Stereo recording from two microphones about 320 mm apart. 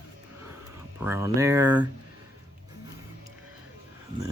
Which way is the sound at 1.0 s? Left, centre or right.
Centre.